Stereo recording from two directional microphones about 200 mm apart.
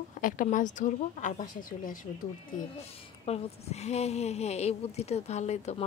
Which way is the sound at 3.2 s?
30° left (ahead or behind).